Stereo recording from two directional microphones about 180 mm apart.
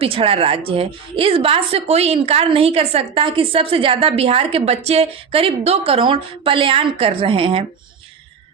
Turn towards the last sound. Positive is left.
turn(degrees=-30)  # may be behind; listen again after turning